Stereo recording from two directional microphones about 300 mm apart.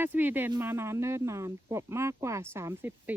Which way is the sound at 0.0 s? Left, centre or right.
Centre.